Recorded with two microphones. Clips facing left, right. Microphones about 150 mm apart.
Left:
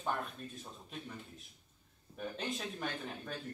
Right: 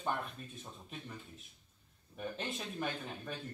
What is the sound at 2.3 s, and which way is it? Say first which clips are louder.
A man's voice: left 2 dB; 5° right (ahead or behind).